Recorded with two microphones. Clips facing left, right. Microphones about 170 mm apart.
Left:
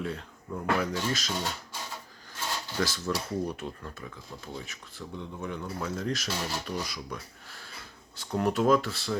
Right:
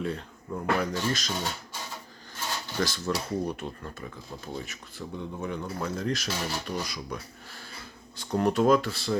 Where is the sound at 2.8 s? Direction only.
5° left (ahead or behind).